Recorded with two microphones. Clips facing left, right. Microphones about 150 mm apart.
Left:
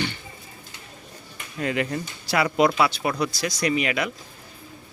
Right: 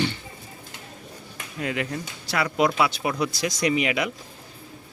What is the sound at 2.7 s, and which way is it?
Speech, 15° right (ahead or behind).